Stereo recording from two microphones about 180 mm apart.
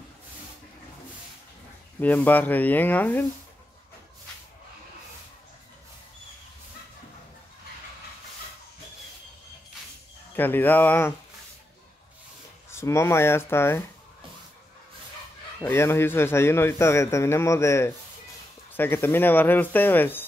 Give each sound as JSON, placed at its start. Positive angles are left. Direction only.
{"t": 2.0, "sound": "a man's voice", "side_deg": 10}
{"t": 10.3, "sound": "a man's voice", "side_deg": 10}
{"t": 12.7, "sound": "a man's voice", "side_deg": 15}
{"t": 15.6, "sound": "a man's voice", "side_deg": 15}